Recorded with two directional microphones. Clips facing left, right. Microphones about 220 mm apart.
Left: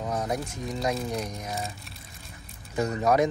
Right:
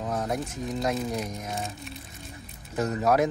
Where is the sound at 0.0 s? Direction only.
Centre (ahead or behind).